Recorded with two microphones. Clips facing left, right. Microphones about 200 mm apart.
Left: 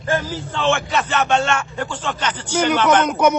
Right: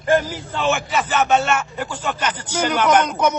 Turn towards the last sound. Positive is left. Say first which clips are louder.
# left 3 dB
turn(degrees=10)  # may be behind; listen again after turning